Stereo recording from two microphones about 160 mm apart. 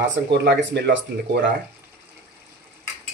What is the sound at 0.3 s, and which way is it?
Speech, 90° right.